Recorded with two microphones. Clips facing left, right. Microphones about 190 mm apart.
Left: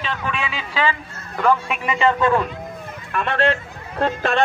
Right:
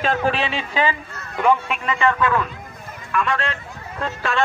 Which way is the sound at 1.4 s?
5° right (ahead or behind).